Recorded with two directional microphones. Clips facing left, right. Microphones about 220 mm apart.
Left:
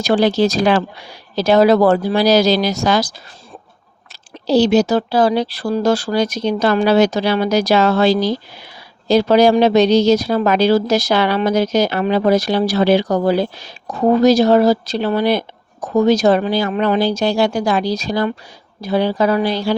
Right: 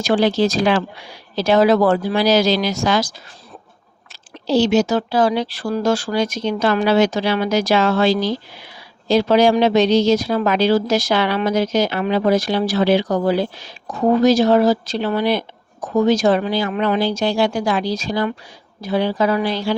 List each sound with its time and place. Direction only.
0.0 s speech: 40° left (ahead or behind)
4.4 s speech: 35° left (ahead or behind)